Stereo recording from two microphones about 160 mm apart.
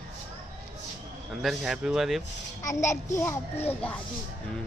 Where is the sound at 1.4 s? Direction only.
Centre (ahead or behind).